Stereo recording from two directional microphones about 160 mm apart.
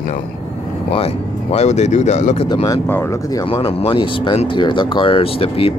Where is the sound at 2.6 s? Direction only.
15° left (ahead or behind).